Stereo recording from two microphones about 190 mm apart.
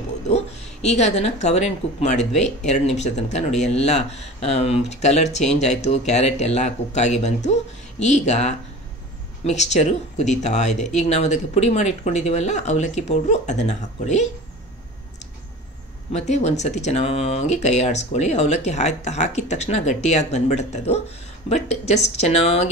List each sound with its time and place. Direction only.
0.8 s speech: 35° left (ahead or behind)
16.1 s speech: 35° left (ahead or behind)